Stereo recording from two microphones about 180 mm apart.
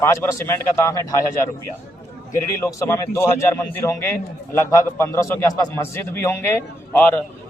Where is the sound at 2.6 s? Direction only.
15° left (ahead or behind).